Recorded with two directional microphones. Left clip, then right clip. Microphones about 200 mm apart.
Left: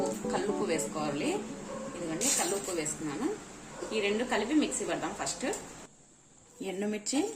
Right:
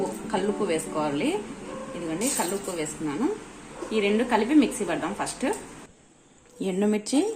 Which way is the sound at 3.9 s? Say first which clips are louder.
Right 7 dB; 35° right (ahead or behind).